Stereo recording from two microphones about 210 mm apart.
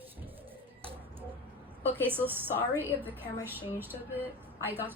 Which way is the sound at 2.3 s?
10° right (ahead or behind).